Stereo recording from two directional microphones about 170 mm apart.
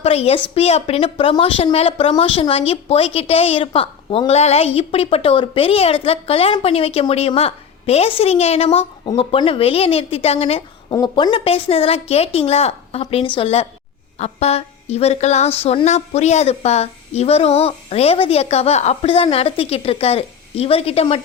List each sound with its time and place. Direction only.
0.0 s a woman's voice: 35° left (ahead or behind)
10.9 s a woman's voice: 25° left (ahead or behind)